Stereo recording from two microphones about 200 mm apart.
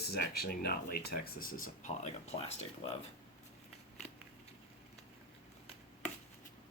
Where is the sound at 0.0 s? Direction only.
50° left (ahead or behind); by 2.9 s 30° left (ahead or behind).